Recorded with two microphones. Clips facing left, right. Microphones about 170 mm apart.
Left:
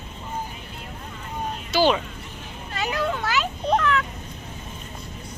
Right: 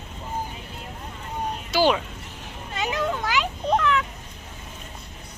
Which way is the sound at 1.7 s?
10° right (ahead or behind).